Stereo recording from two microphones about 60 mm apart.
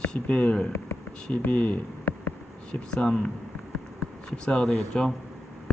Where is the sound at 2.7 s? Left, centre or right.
Centre.